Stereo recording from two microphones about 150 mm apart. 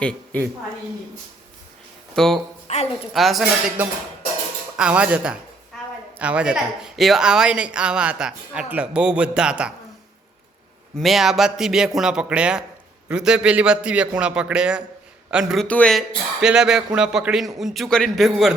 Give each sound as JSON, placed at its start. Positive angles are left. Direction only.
{"t": 0.0, "sound": "a woman's voice", "side_deg": 5}
{"t": 2.1, "sound": "speech", "side_deg": 0}
{"t": 2.7, "sound": "a woman's voice", "side_deg": 50}
{"t": 3.1, "sound": "speech", "side_deg": 0}
{"t": 4.8, "sound": "speech", "side_deg": -5}
{"t": 11.0, "sound": "speech", "side_deg": 0}
{"t": 15.6, "sound": "speech", "side_deg": 10}